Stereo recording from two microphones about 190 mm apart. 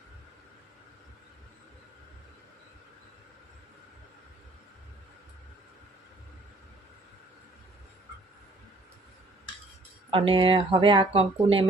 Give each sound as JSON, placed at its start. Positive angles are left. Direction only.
{"t": 10.1, "sound": "speech", "side_deg": -30}